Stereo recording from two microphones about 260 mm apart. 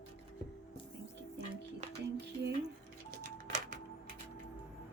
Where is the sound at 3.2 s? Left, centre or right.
Right.